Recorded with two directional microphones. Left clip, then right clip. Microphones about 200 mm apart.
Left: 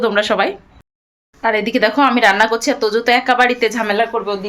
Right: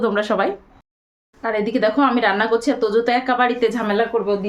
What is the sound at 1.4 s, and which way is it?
A woman's voice, 10° left (ahead or behind).